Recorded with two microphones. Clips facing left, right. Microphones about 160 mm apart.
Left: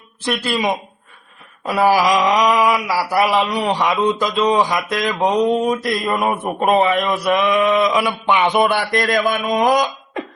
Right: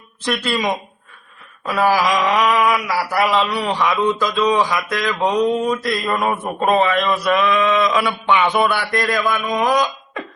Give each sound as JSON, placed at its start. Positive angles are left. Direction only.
{"t": 0.5, "sound": "a man's voice", "side_deg": 15}
{"t": 1.8, "sound": "a man's voice", "side_deg": 15}